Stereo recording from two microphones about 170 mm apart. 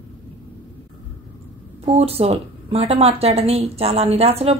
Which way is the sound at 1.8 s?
35° right (ahead or behind).